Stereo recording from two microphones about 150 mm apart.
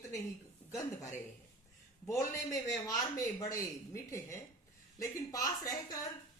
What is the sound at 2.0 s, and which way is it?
A man's voice, 20° left (ahead or behind).